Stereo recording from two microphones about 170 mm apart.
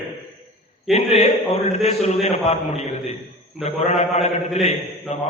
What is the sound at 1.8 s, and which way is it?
A man's voice, 40° left (ahead or behind).